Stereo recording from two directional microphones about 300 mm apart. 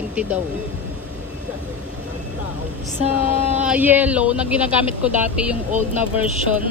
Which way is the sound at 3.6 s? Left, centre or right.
Centre.